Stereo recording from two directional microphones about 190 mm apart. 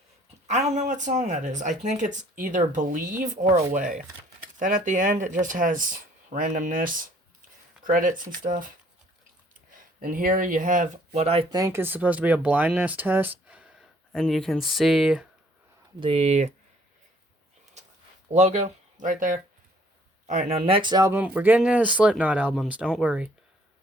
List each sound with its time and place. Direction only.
0.4 s speech: 40° right (ahead or behind)
9.7 s speech: 45° right (ahead or behind)
11.5 s speech: 15° right (ahead or behind)
16.0 s speech: 30° right (ahead or behind)
18.3 s speech: 35° right (ahead or behind); by 23.3 s 5° right (ahead or behind)